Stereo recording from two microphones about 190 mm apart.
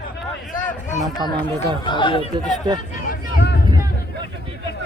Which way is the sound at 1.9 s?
25° left (ahead or behind).